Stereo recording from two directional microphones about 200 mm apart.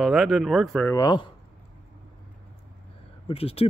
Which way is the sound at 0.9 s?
20° left (ahead or behind).